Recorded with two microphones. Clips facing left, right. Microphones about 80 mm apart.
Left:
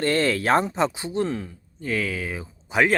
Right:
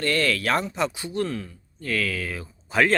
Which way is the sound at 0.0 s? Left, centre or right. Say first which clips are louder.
Left 2 dB; left.